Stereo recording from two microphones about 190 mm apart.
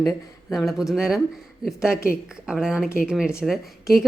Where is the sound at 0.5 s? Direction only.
Centre (ahead or behind).